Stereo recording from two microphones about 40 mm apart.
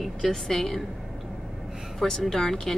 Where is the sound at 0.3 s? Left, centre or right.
Centre.